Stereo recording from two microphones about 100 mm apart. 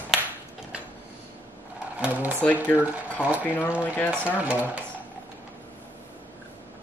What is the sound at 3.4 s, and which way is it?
Speech, 20° left (ahead or behind).